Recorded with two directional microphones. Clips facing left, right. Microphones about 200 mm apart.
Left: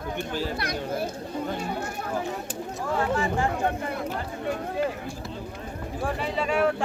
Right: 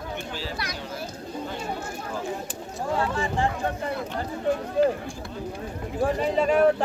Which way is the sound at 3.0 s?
30° right (ahead or behind).